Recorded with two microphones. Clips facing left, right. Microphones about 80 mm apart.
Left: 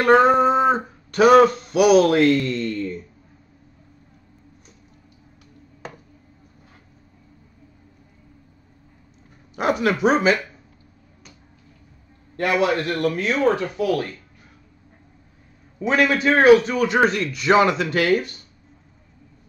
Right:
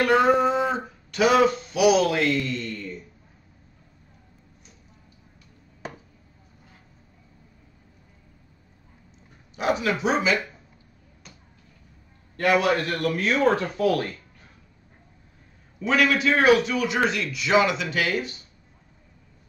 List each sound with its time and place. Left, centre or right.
0.0 s a sound: left
9.6 s speech: left
12.4 s a man's voice: left
13.6 s speech: left
15.8 s a man's voice: left